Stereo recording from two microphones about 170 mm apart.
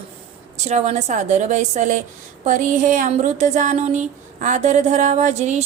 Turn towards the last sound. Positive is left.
turn(degrees=-40)  # may be behind; listen again after turning